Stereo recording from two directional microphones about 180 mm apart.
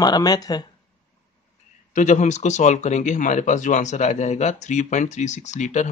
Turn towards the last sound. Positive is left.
turn(degrees=40)  # may be behind; listen again after turning